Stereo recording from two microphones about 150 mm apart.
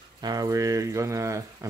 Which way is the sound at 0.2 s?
25° right (ahead or behind).